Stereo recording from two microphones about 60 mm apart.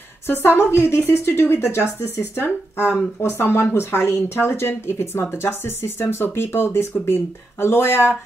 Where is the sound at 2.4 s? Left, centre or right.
Left.